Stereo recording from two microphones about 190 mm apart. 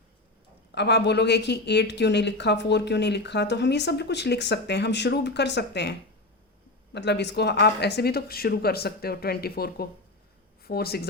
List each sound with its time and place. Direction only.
0.7 s speech: 65° left (ahead or behind)